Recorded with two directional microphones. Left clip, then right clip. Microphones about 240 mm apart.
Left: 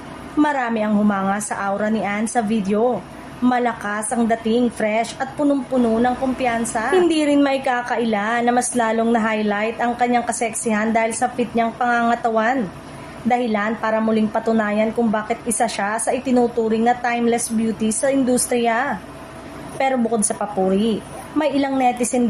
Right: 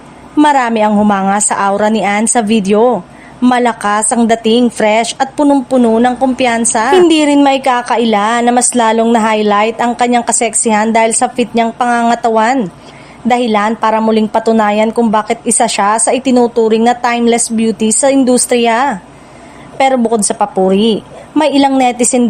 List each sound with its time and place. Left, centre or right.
0.3 s a woman's voice: right